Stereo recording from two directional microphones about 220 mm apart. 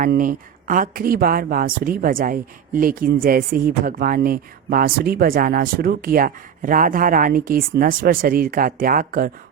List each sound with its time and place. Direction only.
0.0 s speech: 40° right (ahead or behind)